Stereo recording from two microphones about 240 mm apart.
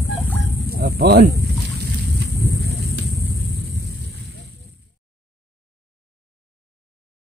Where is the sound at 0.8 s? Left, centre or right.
Right.